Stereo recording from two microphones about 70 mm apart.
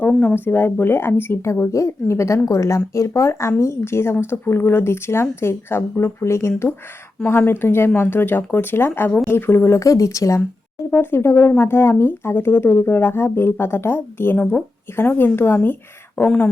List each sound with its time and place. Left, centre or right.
0.2 s speech: left
10.9 s speech: left